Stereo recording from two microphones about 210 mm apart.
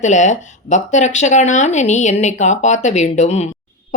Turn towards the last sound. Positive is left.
turn(degrees=30)  # may be behind; listen again after turning